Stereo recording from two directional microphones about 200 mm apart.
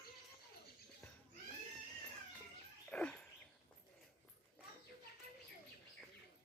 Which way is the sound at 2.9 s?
5° left (ahead or behind).